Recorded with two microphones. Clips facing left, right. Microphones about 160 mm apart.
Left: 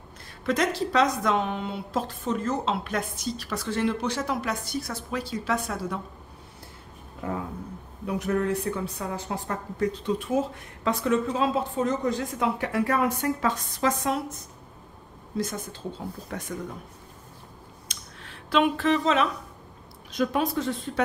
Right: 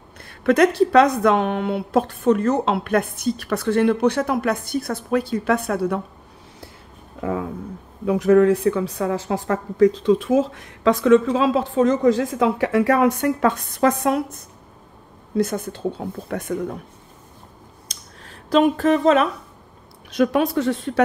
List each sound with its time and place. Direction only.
0.3 s a woman's voice: 65° right (ahead or behind)
7.2 s a woman's voice: 90° right; by 16.7 s 60° right (ahead or behind)
17.8 s a sound: 40° right (ahead or behind)
20.1 s speech: 70° right (ahead or behind)